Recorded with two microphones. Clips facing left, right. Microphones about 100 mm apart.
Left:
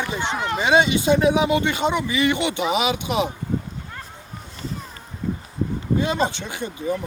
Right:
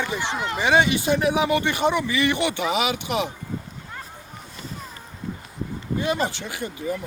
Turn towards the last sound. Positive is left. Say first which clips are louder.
# left 2 dB
turn(degrees=25)  # may be behind; listen again after turning